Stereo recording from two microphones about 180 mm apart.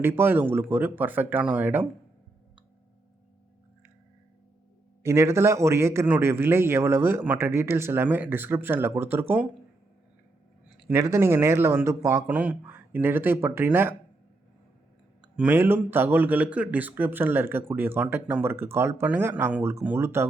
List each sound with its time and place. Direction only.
0.0 s speech: 10° right (ahead or behind)
5.0 s speech: 15° right (ahead or behind)
10.8 s speech: 15° right (ahead or behind)
15.4 s speech: 10° right (ahead or behind)